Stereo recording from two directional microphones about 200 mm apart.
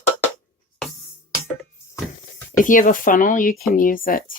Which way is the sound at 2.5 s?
40° left (ahead or behind).